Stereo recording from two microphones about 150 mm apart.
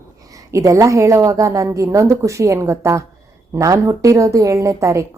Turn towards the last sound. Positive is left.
turn(degrees=-20)  # may be behind; listen again after turning